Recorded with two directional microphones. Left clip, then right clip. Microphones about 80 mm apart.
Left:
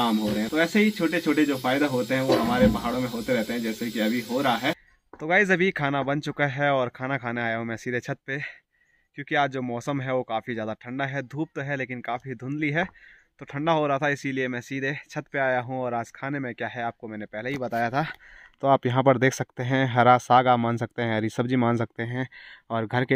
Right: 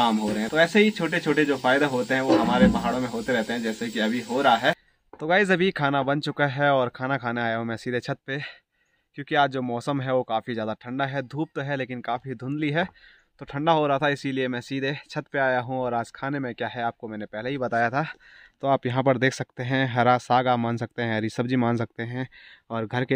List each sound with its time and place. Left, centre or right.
0.0 s speech: right
5.2 s speech: right
18.6 s speech: centre